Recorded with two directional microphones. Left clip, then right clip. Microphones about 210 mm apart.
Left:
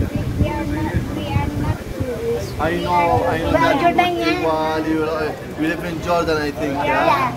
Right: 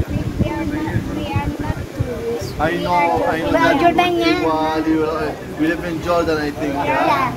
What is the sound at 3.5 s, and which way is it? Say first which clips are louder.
Speech: right 1 dB; 55° right (ahead or behind).